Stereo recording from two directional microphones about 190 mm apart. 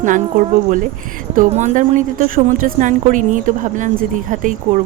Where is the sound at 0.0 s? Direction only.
45° right (ahead or behind).